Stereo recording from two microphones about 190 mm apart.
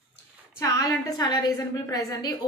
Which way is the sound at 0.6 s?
20° left (ahead or behind).